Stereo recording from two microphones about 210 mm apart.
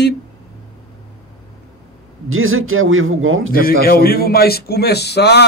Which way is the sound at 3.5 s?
45° left (ahead or behind).